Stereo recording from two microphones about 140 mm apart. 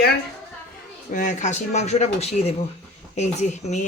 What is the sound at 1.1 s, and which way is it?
Speech, 65° left (ahead or behind).